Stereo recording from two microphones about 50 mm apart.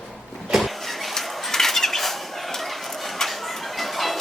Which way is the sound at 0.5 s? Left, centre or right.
Centre.